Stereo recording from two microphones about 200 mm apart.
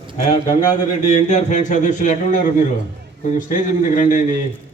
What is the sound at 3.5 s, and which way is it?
Speech, 40° left (ahead or behind).